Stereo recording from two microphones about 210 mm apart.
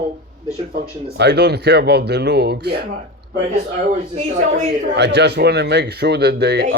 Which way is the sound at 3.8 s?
35° right (ahead or behind).